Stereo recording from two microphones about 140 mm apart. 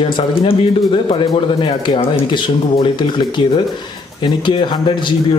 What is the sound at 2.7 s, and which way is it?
A man's voice, 35° left (ahead or behind).